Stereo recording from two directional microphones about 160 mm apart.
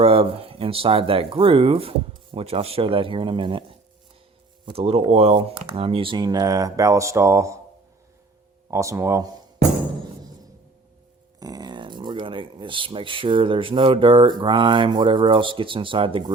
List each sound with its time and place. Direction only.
0.0 s speech: 35° right (ahead or behind); by 7.6 s 20° right (ahead or behind)
8.7 s speech: 20° right (ahead or behind)
11.3 s speech: 25° right (ahead or behind)